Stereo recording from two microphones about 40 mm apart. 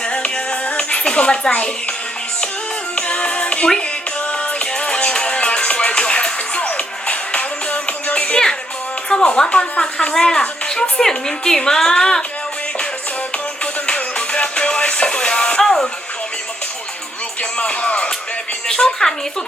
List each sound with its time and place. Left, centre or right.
0.0 s music: left
9.0 s a woman's voice: left
10.2 s a woman's voice: centre
13.8 s music: left
15.6 s a sound: centre
17.6 s music: left
18.7 s a woman's voice: centre